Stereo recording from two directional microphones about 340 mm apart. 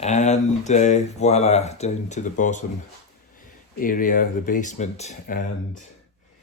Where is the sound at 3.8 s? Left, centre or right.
Left.